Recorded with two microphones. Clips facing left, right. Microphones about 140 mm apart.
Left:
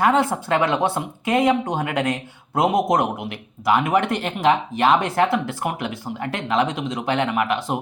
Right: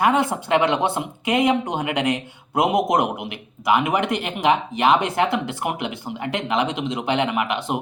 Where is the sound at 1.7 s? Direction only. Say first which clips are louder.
Even; 20° right (ahead or behind).